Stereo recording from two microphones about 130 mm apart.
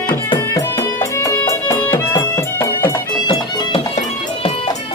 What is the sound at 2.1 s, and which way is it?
Music, 20° left (ahead or behind).